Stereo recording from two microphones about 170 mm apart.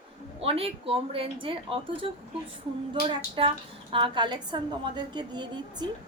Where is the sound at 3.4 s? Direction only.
30° right (ahead or behind).